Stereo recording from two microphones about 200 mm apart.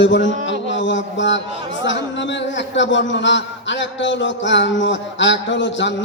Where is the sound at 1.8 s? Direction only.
65° left (ahead or behind).